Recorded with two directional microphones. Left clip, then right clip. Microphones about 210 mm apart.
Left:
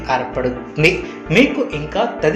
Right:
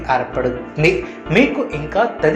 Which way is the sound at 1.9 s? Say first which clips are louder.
Right 2 dB; centre (ahead or behind).